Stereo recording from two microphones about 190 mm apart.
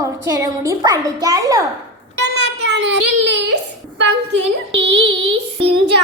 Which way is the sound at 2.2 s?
65° right (ahead or behind).